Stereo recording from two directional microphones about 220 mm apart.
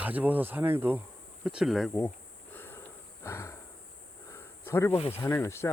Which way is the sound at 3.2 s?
10° left (ahead or behind).